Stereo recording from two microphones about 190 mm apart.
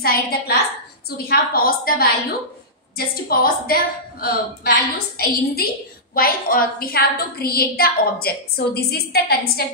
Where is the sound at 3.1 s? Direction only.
50° left (ahead or behind).